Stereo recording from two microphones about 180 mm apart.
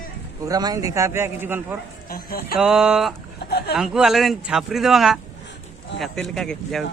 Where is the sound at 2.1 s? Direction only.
55° left (ahead or behind).